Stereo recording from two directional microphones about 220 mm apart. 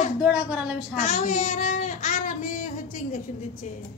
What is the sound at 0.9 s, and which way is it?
Child singing, 35° left (ahead or behind).